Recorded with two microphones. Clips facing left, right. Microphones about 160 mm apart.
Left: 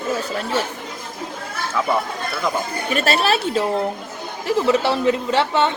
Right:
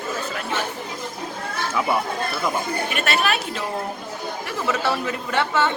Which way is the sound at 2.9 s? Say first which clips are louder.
Left 6 dB; 30° left (ahead or behind).